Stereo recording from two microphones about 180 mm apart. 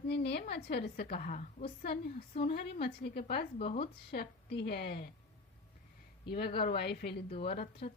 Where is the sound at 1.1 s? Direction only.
45° left (ahead or behind).